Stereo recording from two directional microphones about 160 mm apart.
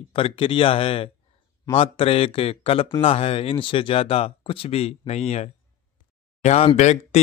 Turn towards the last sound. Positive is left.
turn(degrees=45)  # may be behind; listen again after turning